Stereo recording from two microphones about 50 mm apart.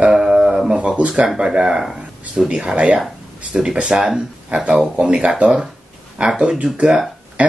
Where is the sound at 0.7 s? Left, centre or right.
Right.